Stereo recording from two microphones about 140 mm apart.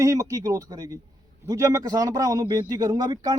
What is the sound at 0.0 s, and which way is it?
Speech, 25° right (ahead or behind).